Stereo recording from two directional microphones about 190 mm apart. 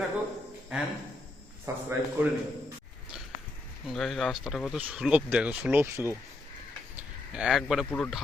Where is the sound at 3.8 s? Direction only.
Centre (ahead or behind).